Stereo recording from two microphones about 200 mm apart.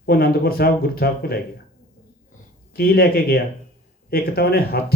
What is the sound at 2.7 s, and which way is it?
Speech, 50° left (ahead or behind).